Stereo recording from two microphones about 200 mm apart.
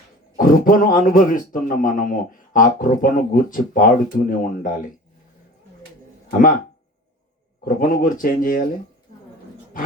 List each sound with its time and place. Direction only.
0.3 s speech: 45° left (ahead or behind)
7.6 s speech: 45° left (ahead or behind)